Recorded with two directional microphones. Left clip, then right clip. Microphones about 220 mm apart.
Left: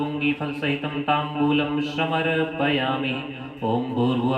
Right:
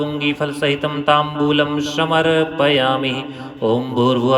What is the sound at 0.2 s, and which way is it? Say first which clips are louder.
Speech: right 8 dB; 40° right (ahead or behind).